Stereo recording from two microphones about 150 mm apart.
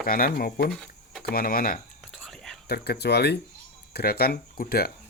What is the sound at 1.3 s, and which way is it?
Speech, 75° left (ahead or behind).